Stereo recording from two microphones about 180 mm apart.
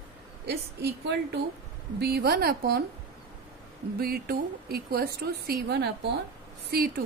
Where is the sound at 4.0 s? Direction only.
60° right (ahead or behind).